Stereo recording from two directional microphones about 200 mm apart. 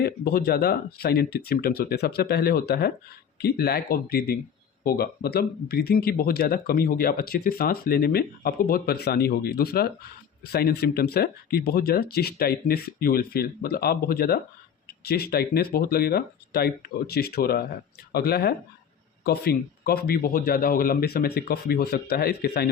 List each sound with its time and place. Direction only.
0.0 s speech: 50° left (ahead or behind)